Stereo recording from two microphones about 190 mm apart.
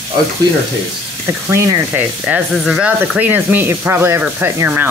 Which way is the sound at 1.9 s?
5° right (ahead or behind).